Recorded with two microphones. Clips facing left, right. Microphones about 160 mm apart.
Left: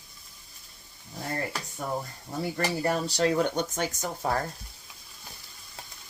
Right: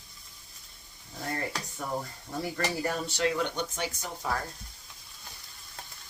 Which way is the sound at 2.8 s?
35° left (ahead or behind).